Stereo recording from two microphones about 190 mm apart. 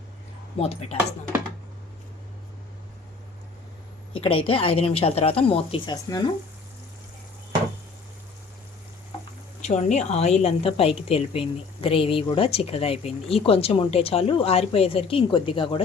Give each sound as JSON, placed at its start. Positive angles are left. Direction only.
{"t": 0.6, "sound": "a woman's voice", "side_deg": 35}
{"t": 4.1, "sound": "a woman's voice", "side_deg": 30}
{"t": 9.6, "sound": "a woman's voice", "side_deg": 35}